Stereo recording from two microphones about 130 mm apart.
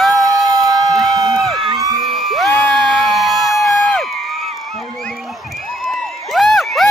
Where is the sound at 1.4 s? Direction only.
Centre (ahead or behind).